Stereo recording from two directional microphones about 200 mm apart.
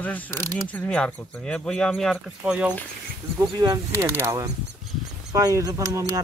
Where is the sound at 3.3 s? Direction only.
20° right (ahead or behind).